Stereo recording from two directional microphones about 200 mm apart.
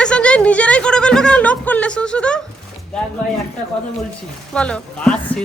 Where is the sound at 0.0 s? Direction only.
5° left (ahead or behind).